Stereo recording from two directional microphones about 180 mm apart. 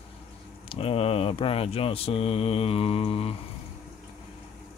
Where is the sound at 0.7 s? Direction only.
30° left (ahead or behind).